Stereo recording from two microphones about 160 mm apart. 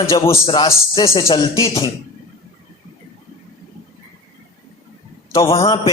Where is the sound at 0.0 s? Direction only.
20° left (ahead or behind).